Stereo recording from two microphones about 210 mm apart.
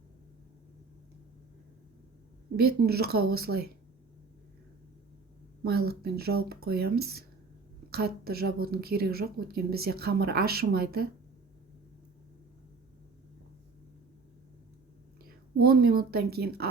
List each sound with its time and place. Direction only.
2.6 s a woman's voice: 50° right (ahead or behind)
5.6 s a woman's voice: 50° right (ahead or behind)
15.2 s a woman's voice: 45° right (ahead or behind)